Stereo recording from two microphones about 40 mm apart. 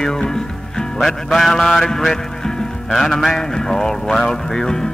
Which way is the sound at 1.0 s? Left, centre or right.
Centre.